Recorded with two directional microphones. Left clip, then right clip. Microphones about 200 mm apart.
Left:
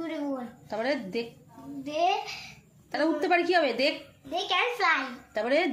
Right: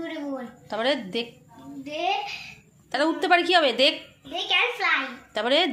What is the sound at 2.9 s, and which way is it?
A woman's voice, centre (ahead or behind).